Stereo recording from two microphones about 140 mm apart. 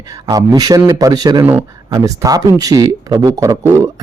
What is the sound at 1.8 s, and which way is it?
Speech, 25° right (ahead or behind).